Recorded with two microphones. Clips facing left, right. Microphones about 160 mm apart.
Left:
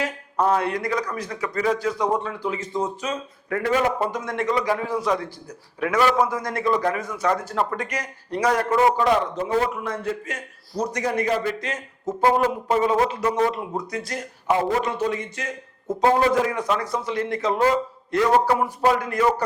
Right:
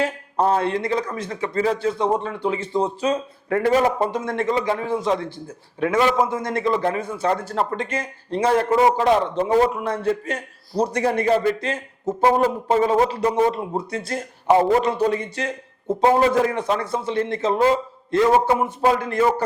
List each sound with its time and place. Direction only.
0.0 s speech: 30° right (ahead or behind)